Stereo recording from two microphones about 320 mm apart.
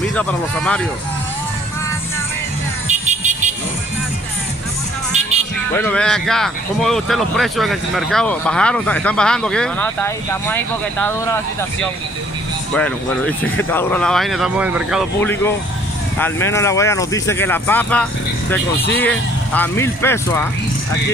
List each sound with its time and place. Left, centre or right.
0.1 s speech: centre
2.9 s vehicle: right
5.7 s speech: centre
12.7 s speech: centre